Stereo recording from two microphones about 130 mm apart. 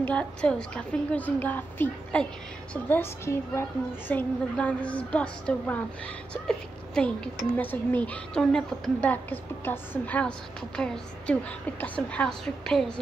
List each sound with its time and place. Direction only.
0.0 s a woman's voice: 10° left (ahead or behind)
7.0 s a woman's voice: 5° left (ahead or behind)